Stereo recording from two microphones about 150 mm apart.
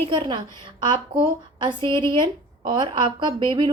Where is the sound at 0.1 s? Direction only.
35° right (ahead or behind).